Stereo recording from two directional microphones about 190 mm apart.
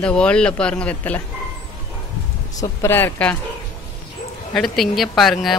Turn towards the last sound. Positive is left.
turn(degrees=0)  # may be behind; listen again after turning